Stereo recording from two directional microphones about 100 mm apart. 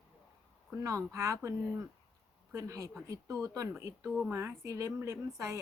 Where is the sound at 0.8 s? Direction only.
30° right (ahead or behind).